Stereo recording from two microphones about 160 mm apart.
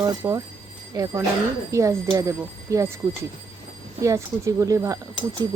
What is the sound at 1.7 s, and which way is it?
Speech, 20° right (ahead or behind).